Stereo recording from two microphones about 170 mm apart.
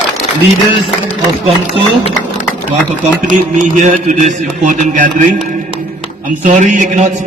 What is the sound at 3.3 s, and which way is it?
A man's voice, 45° right (ahead or behind).